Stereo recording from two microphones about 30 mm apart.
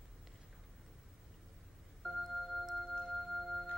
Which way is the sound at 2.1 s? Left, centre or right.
Centre.